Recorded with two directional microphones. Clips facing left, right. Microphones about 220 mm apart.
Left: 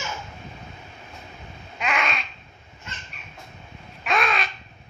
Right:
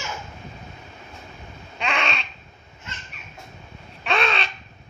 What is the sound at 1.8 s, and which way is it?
Babbling, 30° right (ahead or behind).